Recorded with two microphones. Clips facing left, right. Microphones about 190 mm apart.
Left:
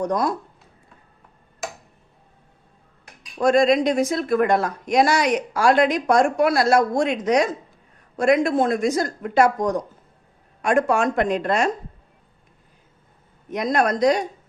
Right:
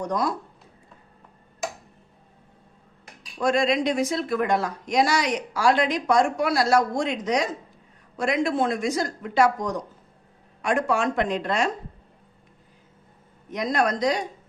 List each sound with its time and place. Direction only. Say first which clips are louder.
0.1 s speech: left 3 dB; 45° left (ahead or behind)
3.3 s speech: left 5 dB; 45° left (ahead or behind)
13.5 s speech: left 3 dB; 55° left (ahead or behind)